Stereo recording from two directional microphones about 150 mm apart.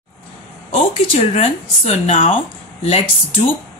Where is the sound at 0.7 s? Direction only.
45° left (ahead or behind).